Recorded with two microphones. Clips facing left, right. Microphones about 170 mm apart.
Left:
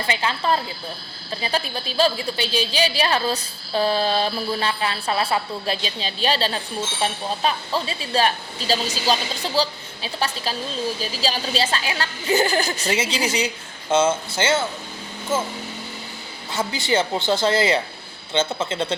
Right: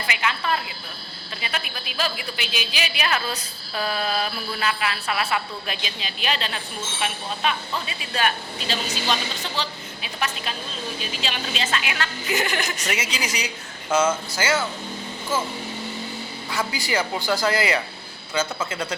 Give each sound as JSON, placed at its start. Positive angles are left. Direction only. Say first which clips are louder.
{"t": 0.1, "sound": "a woman's voice", "louder": "left 3 dB", "side_deg": 30}
{"t": 16.5, "sound": "a woman's voice", "louder": "left 4 dB", "side_deg": 25}